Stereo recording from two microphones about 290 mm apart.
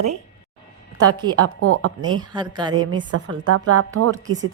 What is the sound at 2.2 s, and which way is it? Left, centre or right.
Mantra, centre.